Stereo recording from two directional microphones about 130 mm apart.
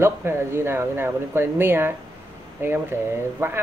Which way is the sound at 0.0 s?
20° right (ahead or behind).